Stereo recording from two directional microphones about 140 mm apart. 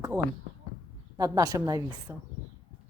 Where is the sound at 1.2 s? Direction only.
25° right (ahead or behind).